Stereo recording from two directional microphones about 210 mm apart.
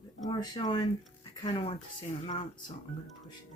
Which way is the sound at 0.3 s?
20° left (ahead or behind).